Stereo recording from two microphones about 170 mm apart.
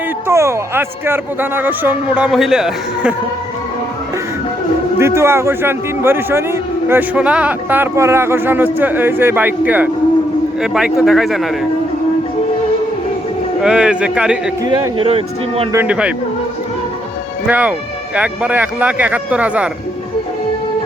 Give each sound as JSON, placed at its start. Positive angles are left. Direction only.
{"t": 0.3, "sound": "a man's voice", "side_deg": -15}
{"t": 4.9, "sound": "a man's voice", "side_deg": -15}
{"t": 10.9, "sound": "a man's voice", "side_deg": 0}
{"t": 13.6, "sound": "a man's voice", "side_deg": -5}
{"t": 14.6, "sound": "speech", "side_deg": -30}
{"t": 15.7, "sound": "a man's voice", "side_deg": -10}
{"t": 17.4, "sound": "a man's voice", "side_deg": -10}